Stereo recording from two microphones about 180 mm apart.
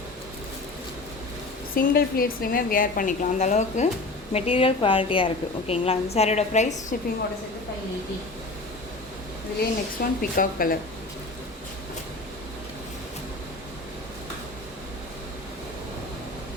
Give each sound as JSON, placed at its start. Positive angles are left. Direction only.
{"t": 1.7, "sound": "a woman's voice", "side_deg": 55}
{"t": 9.6, "sound": "a woman's voice", "side_deg": 55}